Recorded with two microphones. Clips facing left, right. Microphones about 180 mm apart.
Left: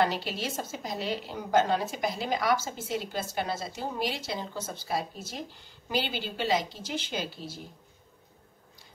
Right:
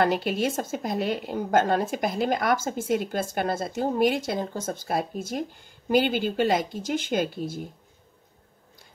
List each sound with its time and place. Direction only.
0.0 s a woman's voice: 55° right (ahead or behind)